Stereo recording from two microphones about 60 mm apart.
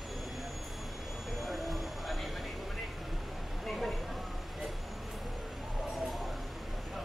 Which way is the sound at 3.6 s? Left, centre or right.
Centre.